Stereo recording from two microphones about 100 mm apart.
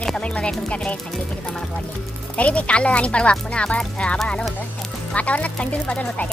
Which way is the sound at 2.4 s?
10° left (ahead or behind).